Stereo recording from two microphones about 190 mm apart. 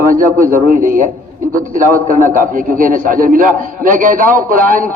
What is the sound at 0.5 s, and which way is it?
A man's voice, 45° right (ahead or behind).